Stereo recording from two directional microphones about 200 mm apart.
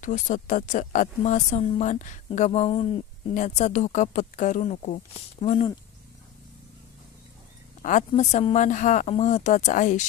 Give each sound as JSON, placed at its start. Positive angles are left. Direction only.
{"t": 0.0, "sound": "speech", "side_deg": 40}
{"t": 7.8, "sound": "speech", "side_deg": 35}